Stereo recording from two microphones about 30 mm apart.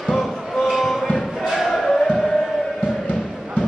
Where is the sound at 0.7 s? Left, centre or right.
Centre.